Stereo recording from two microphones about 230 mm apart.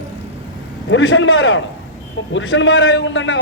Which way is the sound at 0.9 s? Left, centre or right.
Left.